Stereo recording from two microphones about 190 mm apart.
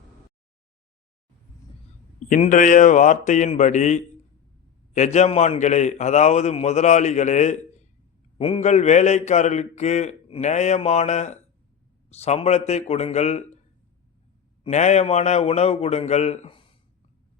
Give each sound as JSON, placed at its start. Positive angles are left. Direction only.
{"t": 2.3, "sound": "a man's voice", "side_deg": 45}
{"t": 14.6, "sound": "a man's voice", "side_deg": 35}